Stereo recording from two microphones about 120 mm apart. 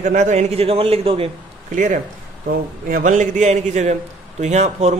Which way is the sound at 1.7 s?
90° right.